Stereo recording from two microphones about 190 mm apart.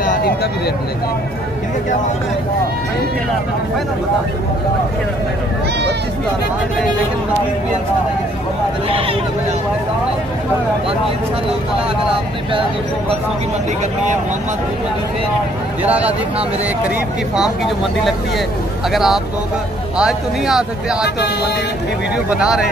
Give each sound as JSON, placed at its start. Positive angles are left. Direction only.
{"t": 0.0, "sound": "a sound", "side_deg": 50}
{"t": 15.8, "sound": "speech", "side_deg": -10}
{"t": 17.4, "sound": "speech", "side_deg": 0}
{"t": 22.1, "sound": "speech", "side_deg": -5}